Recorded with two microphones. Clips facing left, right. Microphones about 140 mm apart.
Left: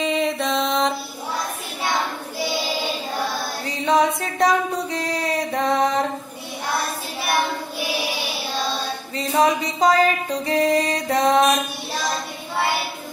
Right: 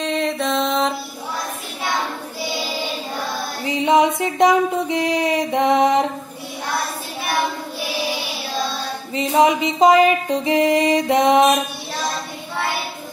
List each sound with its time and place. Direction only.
0.0 s music: centre (ahead or behind)
3.6 s a sound: 15° right (ahead or behind)
9.1 s music: 20° right (ahead or behind)